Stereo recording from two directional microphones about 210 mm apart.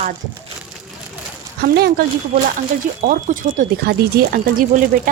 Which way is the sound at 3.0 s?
40° right (ahead or behind).